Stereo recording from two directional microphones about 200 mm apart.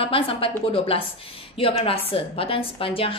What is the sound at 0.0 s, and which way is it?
Speech, 25° left (ahead or behind).